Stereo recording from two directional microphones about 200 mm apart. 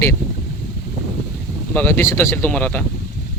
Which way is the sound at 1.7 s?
10° left (ahead or behind).